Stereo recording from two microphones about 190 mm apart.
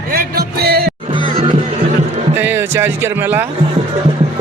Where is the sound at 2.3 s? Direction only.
10° right (ahead or behind).